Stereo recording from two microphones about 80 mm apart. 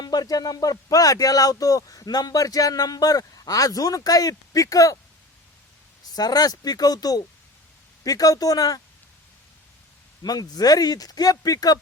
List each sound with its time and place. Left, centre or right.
0.0 s speech: left
6.1 s speech: left
10.2 s speech: left